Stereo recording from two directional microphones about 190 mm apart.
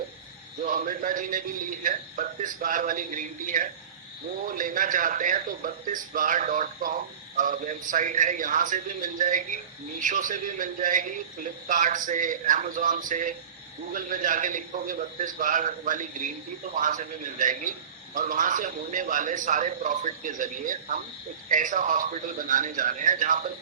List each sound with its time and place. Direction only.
0.6 s a man's voice: 45° right (ahead or behind)